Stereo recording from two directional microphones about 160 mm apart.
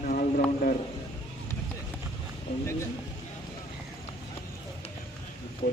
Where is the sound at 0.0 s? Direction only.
55° left (ahead or behind).